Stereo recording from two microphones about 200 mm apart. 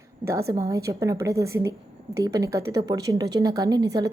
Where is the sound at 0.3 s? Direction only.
15° right (ahead or behind).